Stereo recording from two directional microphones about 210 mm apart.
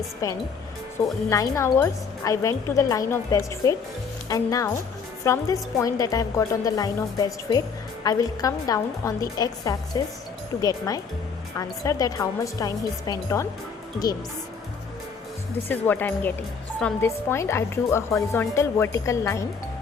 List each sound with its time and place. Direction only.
0.2 s speech: 15° left (ahead or behind)
15.7 s speech: 10° left (ahead or behind)